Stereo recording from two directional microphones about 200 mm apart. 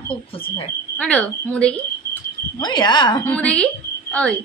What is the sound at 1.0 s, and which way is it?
Speech, 5° left (ahead or behind).